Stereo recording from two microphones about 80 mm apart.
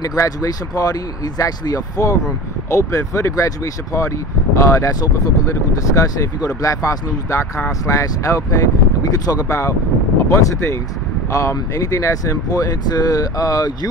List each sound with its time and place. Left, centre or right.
0.0 s speech: left
12.4 s speech: left